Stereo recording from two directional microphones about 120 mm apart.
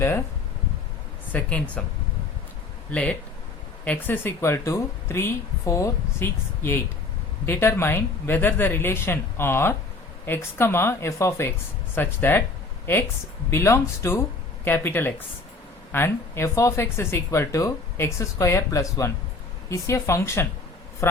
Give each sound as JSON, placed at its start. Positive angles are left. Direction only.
{"t": 1.3, "sound": "speech", "side_deg": 10}
{"t": 2.9, "sound": "speech", "side_deg": 10}
{"t": 21.0, "sound": "a sound", "side_deg": 20}